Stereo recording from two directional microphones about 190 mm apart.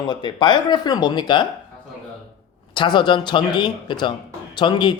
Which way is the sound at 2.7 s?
25° left (ahead or behind).